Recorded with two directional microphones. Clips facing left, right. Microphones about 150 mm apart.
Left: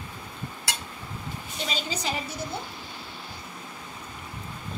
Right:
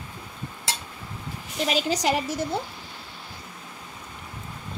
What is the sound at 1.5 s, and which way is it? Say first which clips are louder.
Speech: right 8 dB; 80° right.